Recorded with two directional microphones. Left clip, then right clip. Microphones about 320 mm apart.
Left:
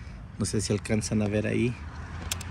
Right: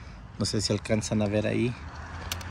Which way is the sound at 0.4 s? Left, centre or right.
Centre.